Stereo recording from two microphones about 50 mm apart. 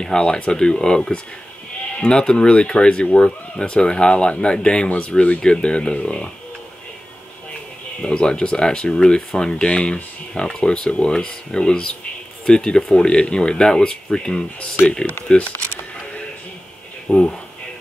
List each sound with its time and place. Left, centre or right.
0.0 s speech: centre
8.0 s speech: centre
17.1 s speech: left